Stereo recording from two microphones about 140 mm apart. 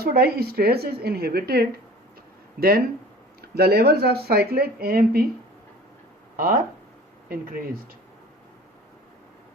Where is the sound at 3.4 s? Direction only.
90° right.